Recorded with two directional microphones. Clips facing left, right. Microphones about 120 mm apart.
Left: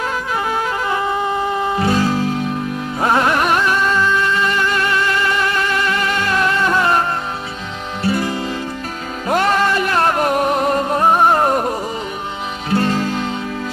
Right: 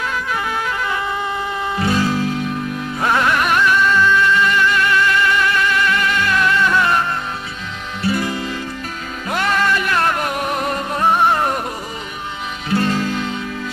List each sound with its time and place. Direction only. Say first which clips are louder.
0.0 s music: left 2 dB; 30° left (ahead or behind)